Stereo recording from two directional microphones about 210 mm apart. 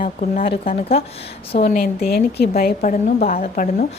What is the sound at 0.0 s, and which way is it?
A woman's voice, 40° left (ahead or behind).